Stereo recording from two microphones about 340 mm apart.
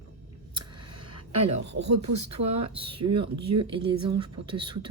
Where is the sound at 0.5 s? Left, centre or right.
Centre.